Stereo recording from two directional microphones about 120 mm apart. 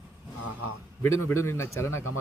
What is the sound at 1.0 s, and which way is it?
Speech, 20° left (ahead or behind).